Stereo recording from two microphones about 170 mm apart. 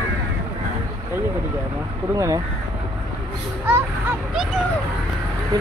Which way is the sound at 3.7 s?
5° right (ahead or behind).